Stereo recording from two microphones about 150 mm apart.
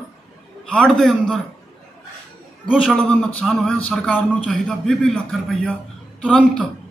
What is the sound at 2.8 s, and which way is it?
A man's voice, 5° left (ahead or behind).